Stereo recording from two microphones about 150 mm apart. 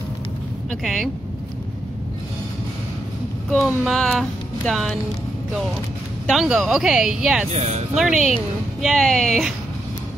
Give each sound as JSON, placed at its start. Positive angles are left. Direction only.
{"t": 0.7, "sound": "speech", "side_deg": 0}
{"t": 3.4, "sound": "speech", "side_deg": 0}
{"t": 6.2, "sound": "speech", "side_deg": 0}
{"t": 7.5, "sound": "speech", "side_deg": -45}
{"t": 7.9, "sound": "speech", "side_deg": -5}